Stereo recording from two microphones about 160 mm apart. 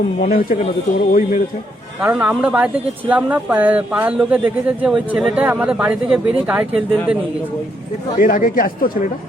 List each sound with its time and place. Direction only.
0.2 s speech: 60° left (ahead or behind)
2.0 s speech: 10° right (ahead or behind)
8.2 s speech: 60° left (ahead or behind)